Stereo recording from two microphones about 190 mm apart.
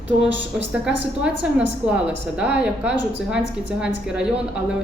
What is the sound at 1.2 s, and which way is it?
A woman's voice, 5° right (ahead or behind).